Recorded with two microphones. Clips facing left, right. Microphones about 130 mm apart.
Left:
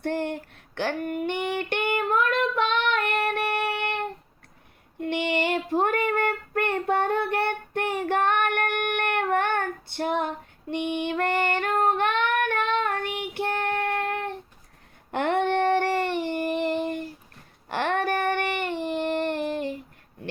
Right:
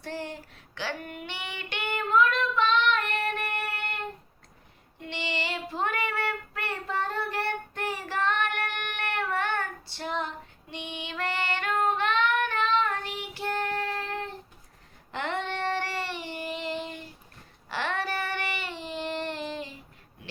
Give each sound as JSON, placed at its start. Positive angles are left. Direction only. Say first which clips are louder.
{"t": 0.0, "sound": "child singing", "louder": "left 8 dB", "side_deg": 60}
{"t": 4.9, "sound": "child singing", "louder": "left 9 dB", "side_deg": 55}
{"t": 15.1, "sound": "a sound", "louder": "left 9 dB", "side_deg": 55}
{"t": 17.7, "sound": "child singing", "louder": "left 6 dB", "side_deg": 55}